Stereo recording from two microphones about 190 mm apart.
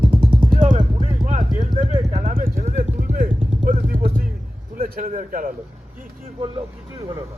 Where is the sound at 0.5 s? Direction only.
40° right (ahead or behind).